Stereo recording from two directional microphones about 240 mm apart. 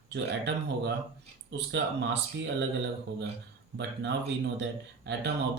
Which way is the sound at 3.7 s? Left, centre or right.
Right.